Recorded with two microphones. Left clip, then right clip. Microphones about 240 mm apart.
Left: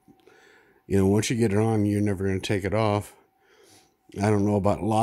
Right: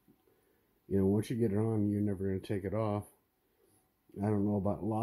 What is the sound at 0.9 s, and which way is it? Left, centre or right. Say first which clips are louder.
Speech: left 9 dB; left.